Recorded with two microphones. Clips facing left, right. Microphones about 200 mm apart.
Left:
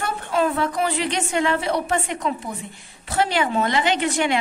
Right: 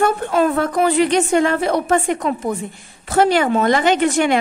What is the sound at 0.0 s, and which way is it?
A woman's voice, 50° right (ahead or behind).